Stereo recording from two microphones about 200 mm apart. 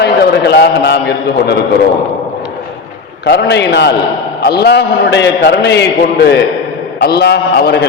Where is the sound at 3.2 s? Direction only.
60° left (ahead or behind).